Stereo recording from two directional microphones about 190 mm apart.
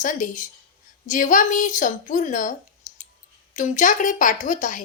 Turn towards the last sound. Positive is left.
turn(degrees=45)  # may be behind; listen again after turning